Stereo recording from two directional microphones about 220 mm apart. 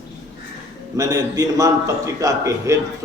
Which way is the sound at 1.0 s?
15° right (ahead or behind).